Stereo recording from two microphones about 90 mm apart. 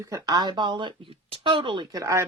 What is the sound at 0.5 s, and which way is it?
Speech, 60° right (ahead or behind).